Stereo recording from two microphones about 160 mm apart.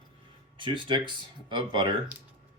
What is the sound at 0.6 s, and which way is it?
Speech, 30° right (ahead or behind).